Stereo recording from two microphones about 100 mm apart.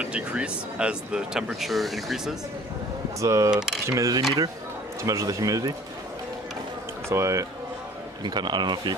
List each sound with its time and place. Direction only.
0.0 s speech: 10° right (ahead or behind)
3.2 s speech: 35° right (ahead or behind)
7.1 s speech: 30° right (ahead or behind)
8.2 s speech: 45° right (ahead or behind)